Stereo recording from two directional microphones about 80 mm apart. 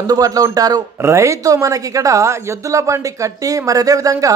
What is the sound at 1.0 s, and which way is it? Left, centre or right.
A woman's voice, right.